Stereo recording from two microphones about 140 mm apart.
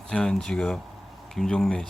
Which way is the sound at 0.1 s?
5° left (ahead or behind).